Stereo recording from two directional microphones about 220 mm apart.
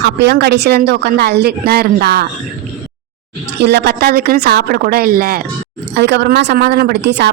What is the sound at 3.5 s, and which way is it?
Speech, 50° right (ahead or behind).